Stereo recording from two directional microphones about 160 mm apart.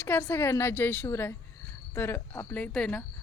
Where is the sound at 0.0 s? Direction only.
10° left (ahead or behind).